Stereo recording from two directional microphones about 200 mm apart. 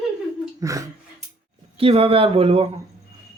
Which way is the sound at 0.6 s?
15° right (ahead or behind).